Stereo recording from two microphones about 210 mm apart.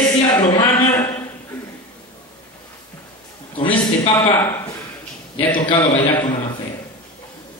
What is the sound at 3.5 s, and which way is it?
Speech, 25° left (ahead or behind).